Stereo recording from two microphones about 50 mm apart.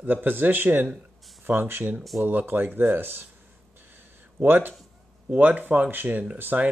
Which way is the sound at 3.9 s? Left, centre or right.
Right.